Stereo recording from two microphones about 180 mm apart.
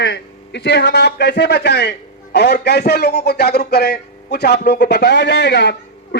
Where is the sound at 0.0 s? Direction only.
70° left (ahead or behind).